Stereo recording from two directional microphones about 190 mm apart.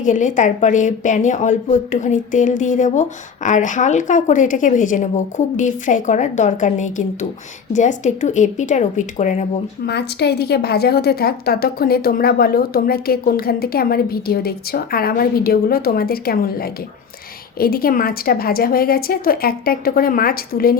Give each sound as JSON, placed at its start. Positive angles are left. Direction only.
{"t": 0.0, "sound": "a woman's voice", "side_deg": 40}
{"t": 9.8, "sound": "a woman's voice", "side_deg": 60}